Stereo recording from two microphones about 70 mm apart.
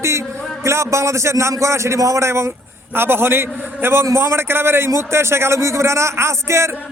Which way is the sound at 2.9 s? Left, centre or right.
Right.